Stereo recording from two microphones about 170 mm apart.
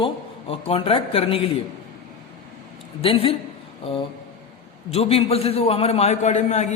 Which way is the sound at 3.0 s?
35° left (ahead or behind).